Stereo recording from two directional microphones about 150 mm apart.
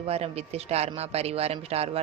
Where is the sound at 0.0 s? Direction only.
45° right (ahead or behind).